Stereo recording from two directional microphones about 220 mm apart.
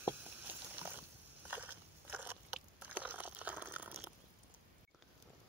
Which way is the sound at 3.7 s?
5° right (ahead or behind).